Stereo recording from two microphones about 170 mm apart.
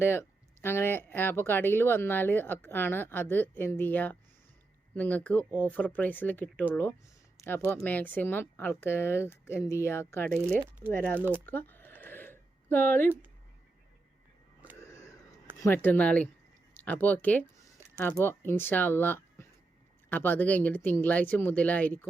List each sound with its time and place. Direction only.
0.0 s speech: 15° left (ahead or behind)
7.3 s a sound: 15° left (ahead or behind)
7.7 s speech: 10° left (ahead or behind)
11.2 s speech: 10° right (ahead or behind)
11.4 s a sound: 10° left (ahead or behind)
14.8 s wheeze: 20° left (ahead or behind)
15.5 s speech: 15° left (ahead or behind)